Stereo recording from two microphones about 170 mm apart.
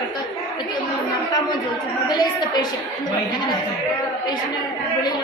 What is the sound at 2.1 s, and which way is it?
Speech, 25° left (ahead or behind).